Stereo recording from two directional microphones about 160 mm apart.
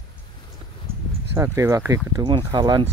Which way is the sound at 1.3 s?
15° right (ahead or behind).